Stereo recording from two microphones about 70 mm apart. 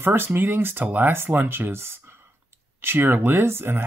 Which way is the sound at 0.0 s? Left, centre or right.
Right.